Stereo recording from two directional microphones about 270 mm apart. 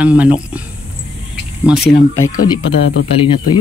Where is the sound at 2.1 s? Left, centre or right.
Centre.